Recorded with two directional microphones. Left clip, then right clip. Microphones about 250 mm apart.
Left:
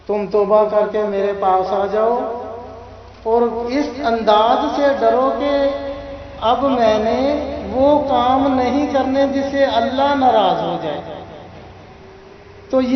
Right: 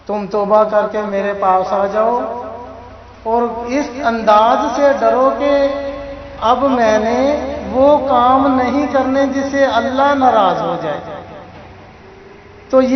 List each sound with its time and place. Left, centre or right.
0.1 s a man's voice: centre
3.2 s a man's voice: centre